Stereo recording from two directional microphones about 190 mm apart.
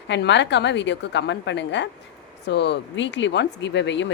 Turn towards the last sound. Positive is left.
turn(degrees=70)  # may be behind; listen again after turning